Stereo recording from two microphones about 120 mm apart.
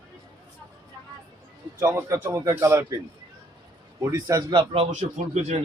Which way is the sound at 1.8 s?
20° right (ahead or behind).